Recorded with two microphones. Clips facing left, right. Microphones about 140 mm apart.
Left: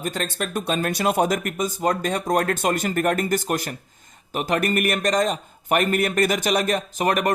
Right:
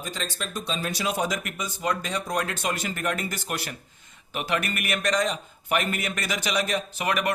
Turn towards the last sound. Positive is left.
turn(degrees=45)  # may be behind; listen again after turning